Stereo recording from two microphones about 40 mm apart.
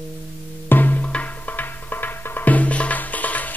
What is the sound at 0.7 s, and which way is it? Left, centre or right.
Music, left.